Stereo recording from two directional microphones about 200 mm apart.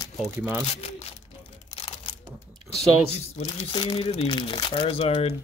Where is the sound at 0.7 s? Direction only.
30° left (ahead or behind).